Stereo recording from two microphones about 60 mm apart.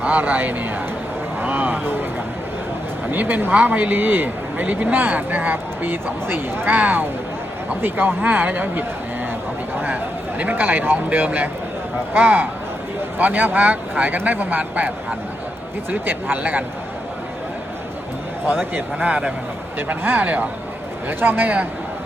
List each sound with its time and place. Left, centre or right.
0.0 s speech: right
1.4 s vehicle: right
3.1 s speech: right
9.8 s speech: right
18.4 s speech: right
21.1 s speech: right